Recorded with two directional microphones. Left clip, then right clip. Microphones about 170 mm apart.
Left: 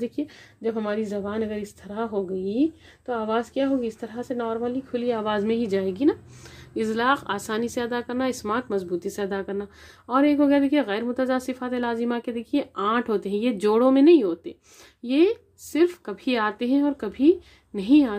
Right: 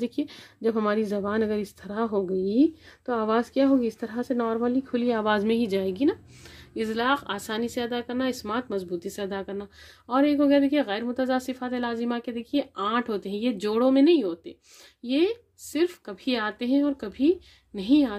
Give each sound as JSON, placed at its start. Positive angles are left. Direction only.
{"t": 0.0, "sound": "speech", "side_deg": -20}
{"t": 0.6, "sound": "a woman's voice", "side_deg": -45}